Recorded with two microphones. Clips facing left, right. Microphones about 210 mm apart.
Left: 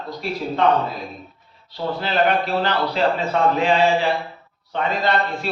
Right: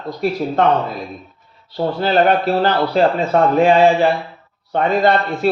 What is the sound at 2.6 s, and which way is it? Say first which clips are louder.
A man's voice: right 5 dB; 45° right (ahead or behind).